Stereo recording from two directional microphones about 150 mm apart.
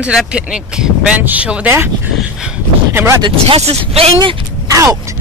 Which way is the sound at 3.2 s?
35° right (ahead or behind).